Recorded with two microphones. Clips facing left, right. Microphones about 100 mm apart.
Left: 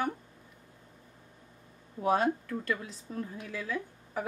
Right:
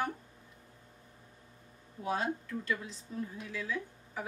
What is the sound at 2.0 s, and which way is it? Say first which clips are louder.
Speech: left 7 dB; 55° left (ahead or behind).